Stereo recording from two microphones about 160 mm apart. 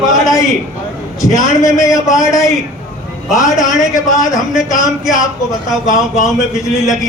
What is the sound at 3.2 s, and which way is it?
A man's voice, centre (ahead or behind).